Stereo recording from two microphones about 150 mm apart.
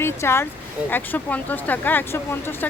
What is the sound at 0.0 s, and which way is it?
Speech, 15° left (ahead or behind).